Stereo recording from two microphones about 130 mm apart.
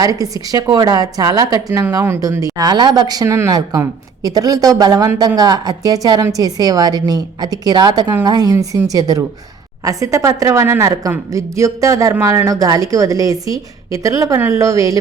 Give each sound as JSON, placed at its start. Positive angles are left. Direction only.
{"t": 0.0, "sound": "speech", "side_deg": -25}